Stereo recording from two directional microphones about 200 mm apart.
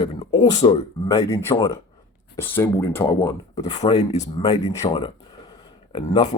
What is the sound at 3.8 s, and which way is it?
Speech, 35° left (ahead or behind).